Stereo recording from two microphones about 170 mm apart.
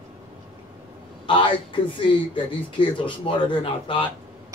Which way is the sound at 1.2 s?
30° left (ahead or behind).